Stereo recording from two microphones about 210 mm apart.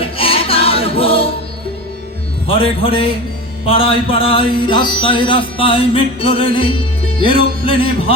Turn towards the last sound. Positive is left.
turn(degrees=25)  # may be behind; listen again after turning